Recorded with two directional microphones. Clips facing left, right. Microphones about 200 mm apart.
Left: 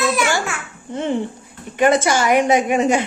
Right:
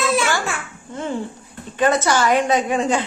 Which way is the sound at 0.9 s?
20° left (ahead or behind).